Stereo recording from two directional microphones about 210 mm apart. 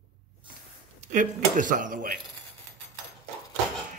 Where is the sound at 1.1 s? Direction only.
40° right (ahead or behind).